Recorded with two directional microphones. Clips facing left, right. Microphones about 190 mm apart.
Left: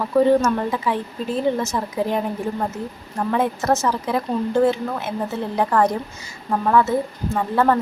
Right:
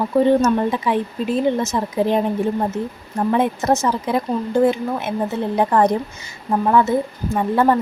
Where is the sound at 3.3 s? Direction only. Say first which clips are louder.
Right 2 dB; 20° right (ahead or behind).